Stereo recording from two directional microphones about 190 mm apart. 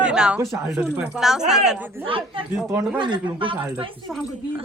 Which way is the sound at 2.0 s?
30° right (ahead or behind).